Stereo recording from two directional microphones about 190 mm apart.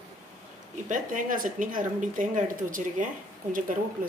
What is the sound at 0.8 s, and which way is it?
Speech, 45° right (ahead or behind).